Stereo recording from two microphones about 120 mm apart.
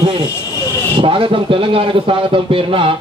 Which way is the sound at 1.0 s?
45° right (ahead or behind).